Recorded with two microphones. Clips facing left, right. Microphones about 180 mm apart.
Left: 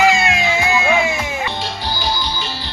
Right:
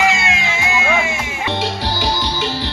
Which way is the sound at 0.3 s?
35° left (ahead or behind).